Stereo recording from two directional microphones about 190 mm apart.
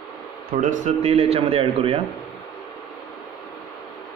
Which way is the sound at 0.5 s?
40° right (ahead or behind).